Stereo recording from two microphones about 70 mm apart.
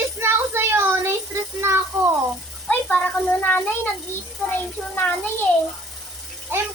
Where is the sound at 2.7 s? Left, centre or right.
Left.